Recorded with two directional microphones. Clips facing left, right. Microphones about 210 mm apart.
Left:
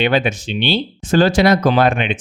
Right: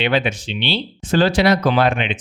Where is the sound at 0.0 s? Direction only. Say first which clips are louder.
Left 2 dB; 45° left (ahead or behind).